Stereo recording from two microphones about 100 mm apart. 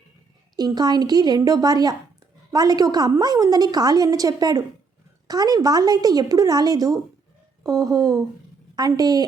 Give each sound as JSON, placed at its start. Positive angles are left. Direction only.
{"t": 0.5, "sound": "a woman's voice", "side_deg": -40}